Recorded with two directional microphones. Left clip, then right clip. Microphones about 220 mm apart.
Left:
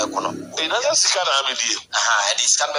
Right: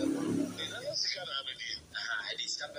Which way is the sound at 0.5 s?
45° left (ahead or behind).